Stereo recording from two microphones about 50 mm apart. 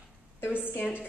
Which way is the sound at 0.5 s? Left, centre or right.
Left.